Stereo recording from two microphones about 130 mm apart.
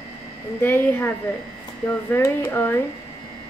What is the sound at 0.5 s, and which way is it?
A woman's voice, 15° left (ahead or behind).